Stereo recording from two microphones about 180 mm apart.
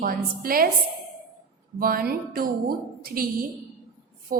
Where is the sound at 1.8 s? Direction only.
55° right (ahead or behind).